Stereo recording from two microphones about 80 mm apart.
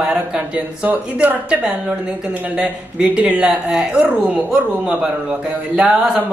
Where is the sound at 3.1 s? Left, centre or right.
Centre.